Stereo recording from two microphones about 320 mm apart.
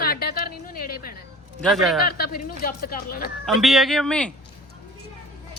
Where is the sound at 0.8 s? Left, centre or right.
Left.